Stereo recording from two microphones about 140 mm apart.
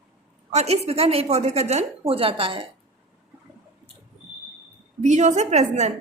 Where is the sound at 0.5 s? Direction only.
50° right (ahead or behind).